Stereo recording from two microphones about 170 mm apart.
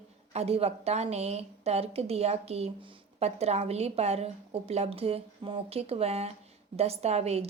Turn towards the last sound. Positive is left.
turn(degrees=-40)  # may be behind; listen again after turning